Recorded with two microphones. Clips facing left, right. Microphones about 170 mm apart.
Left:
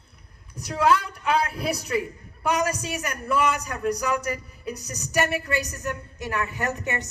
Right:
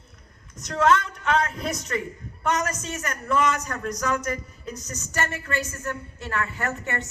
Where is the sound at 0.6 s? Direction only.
10° left (ahead or behind).